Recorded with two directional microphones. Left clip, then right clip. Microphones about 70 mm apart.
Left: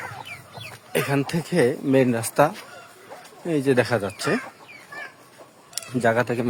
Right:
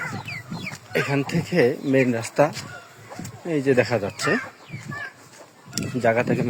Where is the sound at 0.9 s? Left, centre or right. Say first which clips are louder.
Even; left.